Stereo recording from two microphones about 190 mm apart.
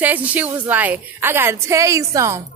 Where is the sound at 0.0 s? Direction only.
10° right (ahead or behind).